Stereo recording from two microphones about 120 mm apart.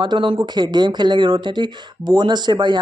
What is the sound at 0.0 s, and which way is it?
Speech, 40° right (ahead or behind).